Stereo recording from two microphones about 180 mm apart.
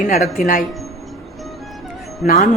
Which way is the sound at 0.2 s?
50° left (ahead or behind).